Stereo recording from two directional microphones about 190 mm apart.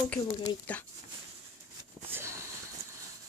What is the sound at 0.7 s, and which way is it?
Speech, 5° left (ahead or behind).